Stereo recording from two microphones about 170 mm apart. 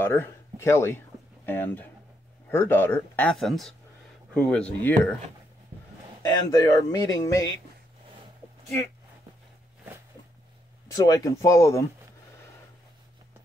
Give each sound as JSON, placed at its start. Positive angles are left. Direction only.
{"t": 0.0, "sound": "speech", "side_deg": 15}
{"t": 6.2, "sound": "speech", "side_deg": 20}
{"t": 10.9, "sound": "speech", "side_deg": 20}